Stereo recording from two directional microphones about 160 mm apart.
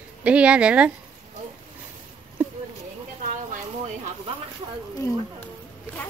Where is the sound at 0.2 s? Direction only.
5° right (ahead or behind).